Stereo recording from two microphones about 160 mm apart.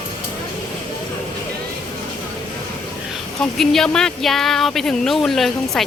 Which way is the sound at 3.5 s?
5° left (ahead or behind).